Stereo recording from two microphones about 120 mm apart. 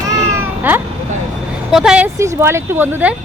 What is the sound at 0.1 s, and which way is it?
Cat, 25° right (ahead or behind).